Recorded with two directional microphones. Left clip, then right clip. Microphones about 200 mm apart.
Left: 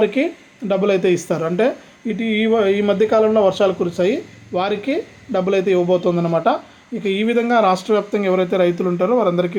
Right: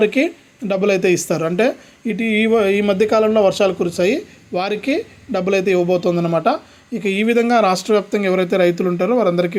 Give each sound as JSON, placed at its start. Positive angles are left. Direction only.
{"t": 0.0, "sound": "a woman's voice", "side_deg": -30}